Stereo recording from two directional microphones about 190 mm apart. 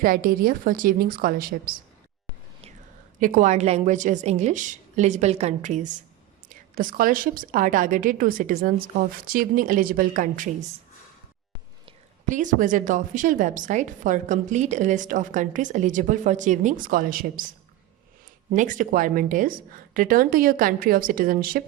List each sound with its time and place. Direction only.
0.0 s a woman's voice: 50° right (ahead or behind)
3.2 s a woman's voice: 45° right (ahead or behind)
12.2 s a woman's voice: 40° right (ahead or behind)
18.5 s a woman's voice: 45° right (ahead or behind)